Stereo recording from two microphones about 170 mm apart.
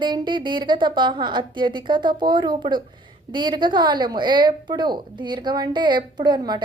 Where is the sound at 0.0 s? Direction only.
25° right (ahead or behind).